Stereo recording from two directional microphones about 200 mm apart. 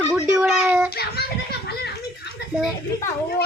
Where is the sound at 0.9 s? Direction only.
50° left (ahead or behind).